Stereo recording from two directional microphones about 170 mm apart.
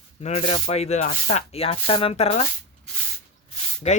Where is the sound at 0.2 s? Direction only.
40° left (ahead or behind).